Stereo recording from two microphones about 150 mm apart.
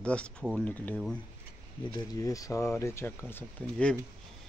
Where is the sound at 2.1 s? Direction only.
20° left (ahead or behind).